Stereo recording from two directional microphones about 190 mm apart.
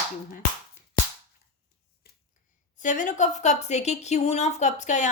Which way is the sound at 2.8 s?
45° left (ahead or behind).